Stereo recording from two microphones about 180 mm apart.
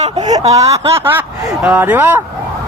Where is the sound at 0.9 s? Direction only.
10° right (ahead or behind).